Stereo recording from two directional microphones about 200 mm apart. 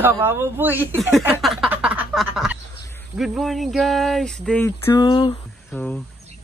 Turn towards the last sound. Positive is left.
turn(degrees=5)  # may be behind; listen again after turning